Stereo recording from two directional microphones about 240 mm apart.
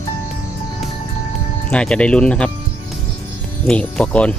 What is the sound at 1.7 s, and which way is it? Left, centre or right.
Speech, centre.